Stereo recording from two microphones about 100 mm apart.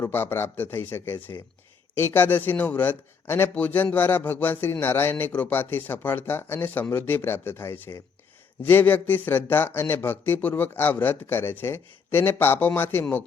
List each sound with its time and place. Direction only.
0.0 s speech: 20° left (ahead or behind)